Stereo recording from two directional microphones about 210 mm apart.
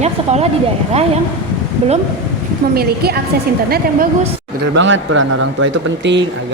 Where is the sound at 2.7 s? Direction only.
50° right (ahead or behind).